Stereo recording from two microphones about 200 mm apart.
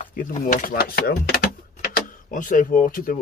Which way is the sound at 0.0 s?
40° left (ahead or behind).